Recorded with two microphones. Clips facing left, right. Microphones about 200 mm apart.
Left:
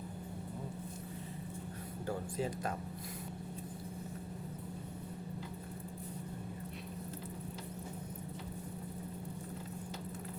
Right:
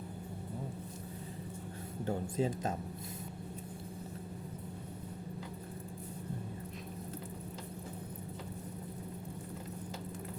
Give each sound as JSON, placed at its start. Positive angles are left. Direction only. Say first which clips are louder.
{"t": 2.0, "sound": "speech", "louder": "right 4 dB", "side_deg": -25}